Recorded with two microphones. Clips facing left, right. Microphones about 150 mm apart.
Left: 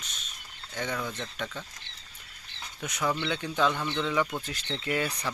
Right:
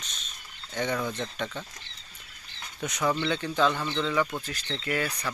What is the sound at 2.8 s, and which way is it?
Speech, 5° left (ahead or behind).